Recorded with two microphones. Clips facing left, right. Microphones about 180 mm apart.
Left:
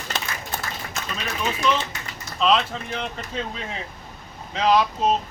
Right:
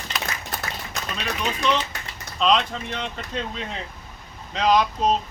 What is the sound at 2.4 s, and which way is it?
A man's voice, 5° left (ahead or behind).